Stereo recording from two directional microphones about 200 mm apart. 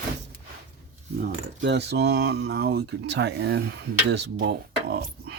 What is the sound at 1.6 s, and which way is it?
Speech, 55° right (ahead or behind).